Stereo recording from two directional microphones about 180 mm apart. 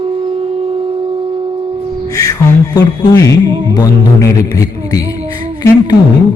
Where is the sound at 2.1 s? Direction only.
20° left (ahead or behind).